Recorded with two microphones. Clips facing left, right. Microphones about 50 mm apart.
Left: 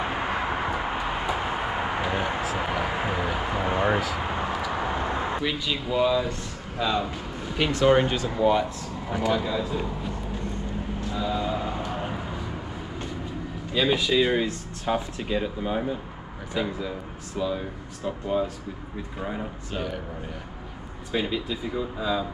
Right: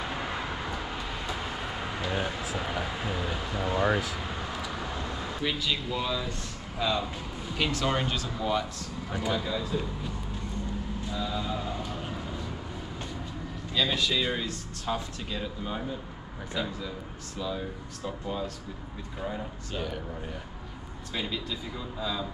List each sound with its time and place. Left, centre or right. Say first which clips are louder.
0.0 s vehicle: left 6 dB; left
5.4 s speech: left 2 dB; centre
11.1 s a sound: left 6 dB; left
13.7 s speech: left 6 dB; centre
21.1 s speech: left 6 dB; centre